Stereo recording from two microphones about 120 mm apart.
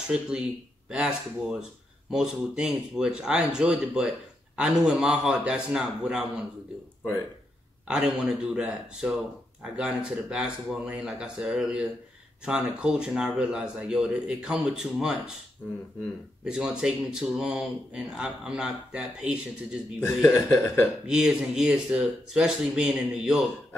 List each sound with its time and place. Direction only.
0.1 s speech: 5° right (ahead or behind)
7.9 s speech: 5° right (ahead or behind)
16.4 s speech: 5° right (ahead or behind)
20.4 s speech: 20° left (ahead or behind)
21.1 s speech: 5° right (ahead or behind)